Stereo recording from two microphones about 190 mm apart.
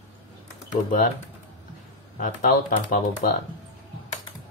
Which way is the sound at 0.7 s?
45° left (ahead or behind).